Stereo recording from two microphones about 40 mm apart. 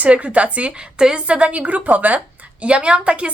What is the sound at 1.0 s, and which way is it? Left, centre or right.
A woman's voice, right.